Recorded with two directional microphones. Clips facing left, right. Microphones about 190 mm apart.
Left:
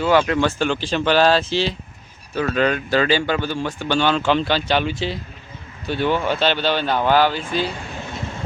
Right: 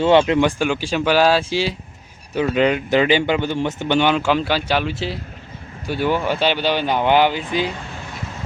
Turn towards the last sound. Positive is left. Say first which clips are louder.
# right 1 dB
turn(degrees=-15)  # may be behind; listen again after turning